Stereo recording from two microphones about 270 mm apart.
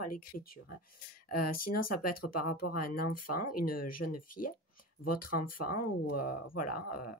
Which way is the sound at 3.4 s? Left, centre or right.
Left.